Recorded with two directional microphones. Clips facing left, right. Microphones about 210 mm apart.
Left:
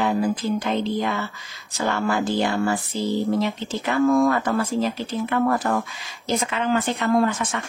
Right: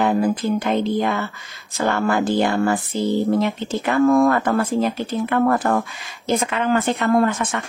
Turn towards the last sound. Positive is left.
turn(degrees=-55)  # may be behind; listen again after turning